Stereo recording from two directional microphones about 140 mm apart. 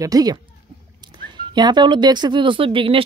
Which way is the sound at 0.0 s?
25° right (ahead or behind).